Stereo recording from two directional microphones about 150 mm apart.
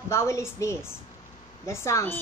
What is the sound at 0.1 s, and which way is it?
A woman's voice, 20° left (ahead or behind).